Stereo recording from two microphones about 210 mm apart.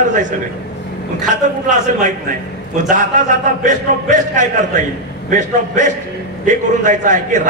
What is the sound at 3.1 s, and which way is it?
A man's voice, 35° right (ahead or behind).